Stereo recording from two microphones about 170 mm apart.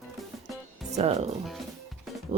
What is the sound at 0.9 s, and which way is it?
Speech, 40° right (ahead or behind).